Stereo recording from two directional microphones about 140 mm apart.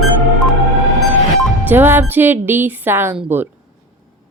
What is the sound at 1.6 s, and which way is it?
Speech, 15° right (ahead or behind).